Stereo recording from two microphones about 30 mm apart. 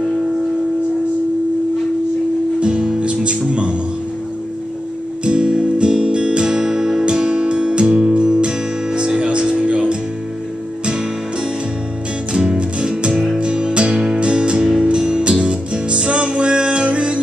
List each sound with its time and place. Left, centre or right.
2.6 s music: right
3.0 s speech: right
5.2 s music: right
12.3 s music: right